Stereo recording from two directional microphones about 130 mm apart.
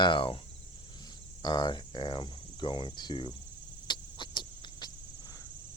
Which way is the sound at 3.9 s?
35° left (ahead or behind).